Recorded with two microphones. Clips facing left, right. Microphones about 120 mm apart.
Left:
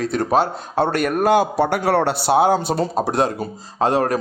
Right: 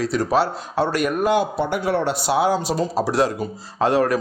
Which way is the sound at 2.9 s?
50° left (ahead or behind).